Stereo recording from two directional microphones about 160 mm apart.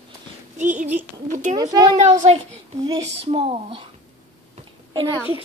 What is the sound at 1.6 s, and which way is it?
Speech, 25° right (ahead or behind).